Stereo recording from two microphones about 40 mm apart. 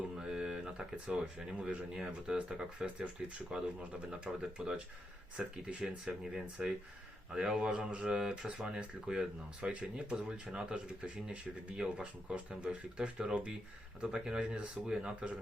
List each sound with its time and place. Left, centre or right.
0.2 s speech: centre
2.7 s speech: right
3.5 s speech: centre
12.5 s speech: right
13.0 s speech: right